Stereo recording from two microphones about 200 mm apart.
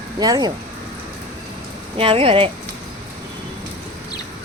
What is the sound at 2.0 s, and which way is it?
Speech, 30° right (ahead or behind).